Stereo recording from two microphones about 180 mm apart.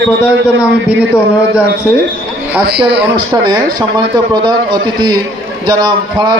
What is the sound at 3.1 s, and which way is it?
A man's voice, 20° right (ahead or behind).